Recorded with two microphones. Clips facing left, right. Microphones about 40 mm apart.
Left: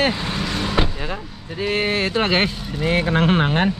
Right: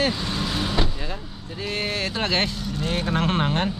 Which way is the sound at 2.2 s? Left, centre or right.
Left.